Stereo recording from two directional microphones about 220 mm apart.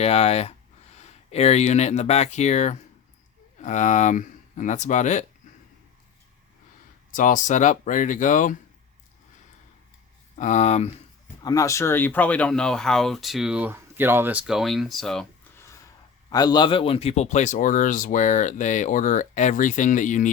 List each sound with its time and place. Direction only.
0.0 s speech: 30° left (ahead or behind)
7.1 s speech: 35° left (ahead or behind)
10.3 s speech: 35° left (ahead or behind)
11.4 s speech: 15° left (ahead or behind)
16.3 s speech: 20° left (ahead or behind); by 20.3 s 35° left (ahead or behind)